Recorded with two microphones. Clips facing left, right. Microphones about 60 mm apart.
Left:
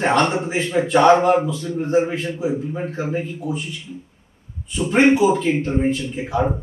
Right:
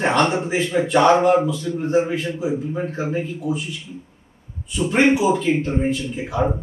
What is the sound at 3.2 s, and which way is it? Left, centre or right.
Speech, centre.